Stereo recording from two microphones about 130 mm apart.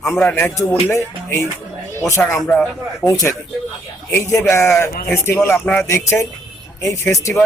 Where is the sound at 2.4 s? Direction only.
5° left (ahead or behind).